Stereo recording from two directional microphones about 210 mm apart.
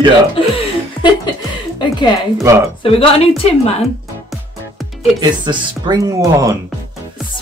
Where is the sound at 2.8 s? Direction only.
25° left (ahead or behind).